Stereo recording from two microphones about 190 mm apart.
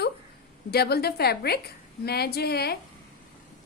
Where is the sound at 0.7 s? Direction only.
55° left (ahead or behind).